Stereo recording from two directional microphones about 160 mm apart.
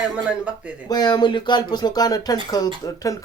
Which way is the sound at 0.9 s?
25° left (ahead or behind).